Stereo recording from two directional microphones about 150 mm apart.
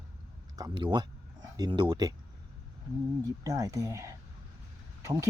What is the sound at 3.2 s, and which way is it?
Speech, 25° right (ahead or behind).